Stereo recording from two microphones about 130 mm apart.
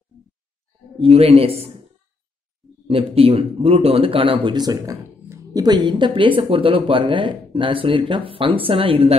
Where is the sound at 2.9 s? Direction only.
45° right (ahead or behind).